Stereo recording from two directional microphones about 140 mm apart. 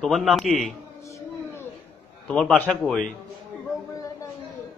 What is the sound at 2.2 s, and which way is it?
Speech, 5° left (ahead or behind).